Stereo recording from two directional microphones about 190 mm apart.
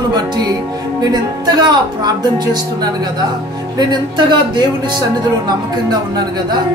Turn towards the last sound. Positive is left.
turn(degrees=-20)  # may be behind; listen again after turning